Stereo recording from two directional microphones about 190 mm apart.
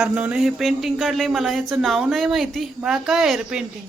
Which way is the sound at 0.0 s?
5° right (ahead or behind).